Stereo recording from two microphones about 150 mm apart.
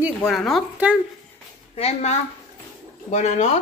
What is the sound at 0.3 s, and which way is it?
Speech, centre (ahead or behind).